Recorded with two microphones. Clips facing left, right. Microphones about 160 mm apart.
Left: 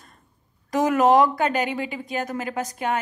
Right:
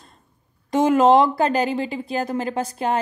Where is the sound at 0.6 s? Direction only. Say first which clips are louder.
Right 3 dB; 25° right (ahead or behind).